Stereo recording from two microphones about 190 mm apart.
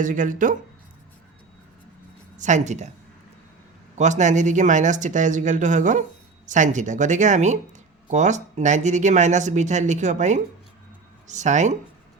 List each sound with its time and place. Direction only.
0.0 s speech: 45° right (ahead or behind)
2.4 s speech: 40° right (ahead or behind)
3.9 s speech: 40° right (ahead or behind)